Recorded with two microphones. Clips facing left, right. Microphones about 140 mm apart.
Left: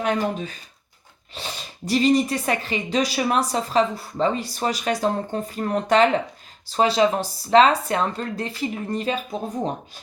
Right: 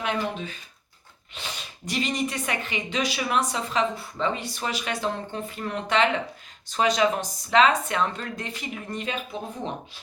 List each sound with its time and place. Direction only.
0.0 s speech: 40° left (ahead or behind)